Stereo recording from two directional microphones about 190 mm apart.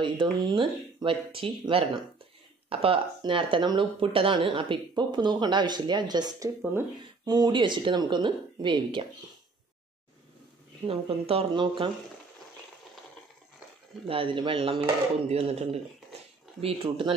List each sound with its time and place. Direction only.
0.0 s speech: 25° right (ahead or behind)
10.9 s speech: 30° right (ahead or behind)
14.0 s speech: 25° right (ahead or behind)